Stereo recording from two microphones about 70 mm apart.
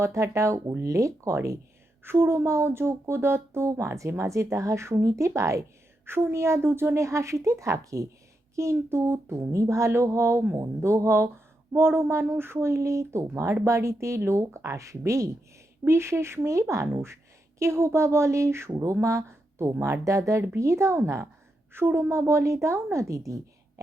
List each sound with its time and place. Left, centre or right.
0.0 s a woman's voice: right